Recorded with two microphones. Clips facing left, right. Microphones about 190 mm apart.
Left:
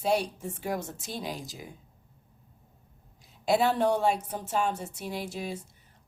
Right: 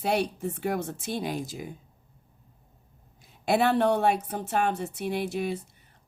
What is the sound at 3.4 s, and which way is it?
Speech, 60° right (ahead or behind).